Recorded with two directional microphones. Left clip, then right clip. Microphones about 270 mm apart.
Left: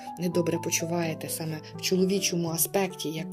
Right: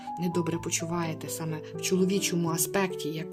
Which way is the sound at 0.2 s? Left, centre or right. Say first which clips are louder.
Left 4 dB; centre.